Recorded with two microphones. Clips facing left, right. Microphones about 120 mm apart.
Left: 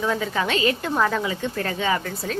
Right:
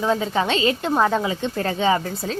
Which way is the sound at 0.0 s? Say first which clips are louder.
Right 3 dB; 25° right (ahead or behind).